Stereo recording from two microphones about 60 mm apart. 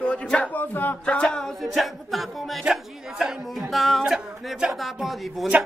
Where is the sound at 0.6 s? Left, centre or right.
Left.